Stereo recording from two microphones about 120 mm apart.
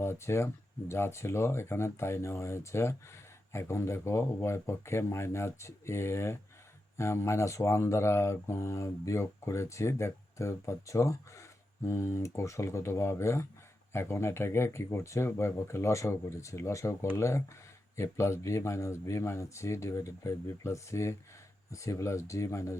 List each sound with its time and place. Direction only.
0.0 s speech: 20° left (ahead or behind)